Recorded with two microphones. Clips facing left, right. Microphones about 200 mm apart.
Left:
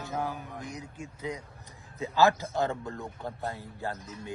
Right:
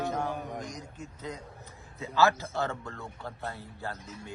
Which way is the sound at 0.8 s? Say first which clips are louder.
Left 3 dB; 10° left (ahead or behind).